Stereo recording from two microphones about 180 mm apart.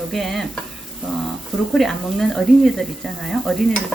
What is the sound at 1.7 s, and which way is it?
Speech, centre (ahead or behind).